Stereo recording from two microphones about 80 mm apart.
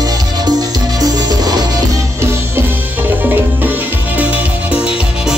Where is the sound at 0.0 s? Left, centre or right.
Right.